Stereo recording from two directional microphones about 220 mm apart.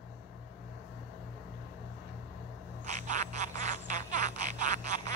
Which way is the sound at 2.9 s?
35° right (ahead or behind).